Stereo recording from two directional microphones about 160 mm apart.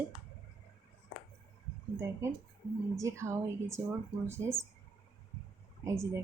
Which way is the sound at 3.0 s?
20° right (ahead or behind).